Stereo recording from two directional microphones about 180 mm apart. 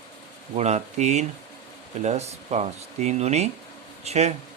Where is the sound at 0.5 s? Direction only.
40° right (ahead or behind).